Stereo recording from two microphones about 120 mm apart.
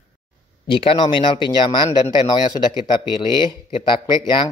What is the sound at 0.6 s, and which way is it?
Speech, 45° left (ahead or behind).